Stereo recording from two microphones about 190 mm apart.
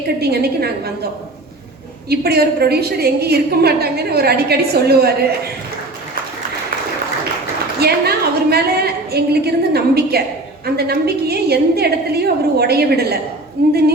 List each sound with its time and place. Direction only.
0.2 s a woman's voice: 55° right (ahead or behind)
2.0 s a woman's voice: 55° right (ahead or behind)
7.8 s a woman's voice: 55° right (ahead or behind)